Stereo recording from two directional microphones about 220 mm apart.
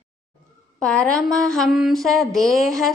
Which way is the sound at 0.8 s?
5° left (ahead or behind).